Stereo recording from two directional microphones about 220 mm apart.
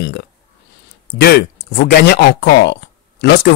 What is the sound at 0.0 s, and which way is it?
Speech, 50° left (ahead or behind).